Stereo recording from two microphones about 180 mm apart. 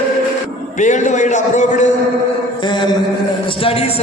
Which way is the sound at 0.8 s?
45° left (ahead or behind).